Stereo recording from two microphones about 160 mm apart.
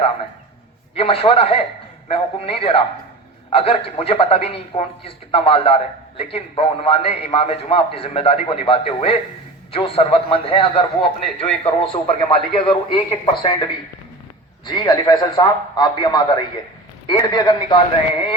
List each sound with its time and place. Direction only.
0.9 s a man's voice: 35° left (ahead or behind)
14.6 s a man's voice: 25° left (ahead or behind)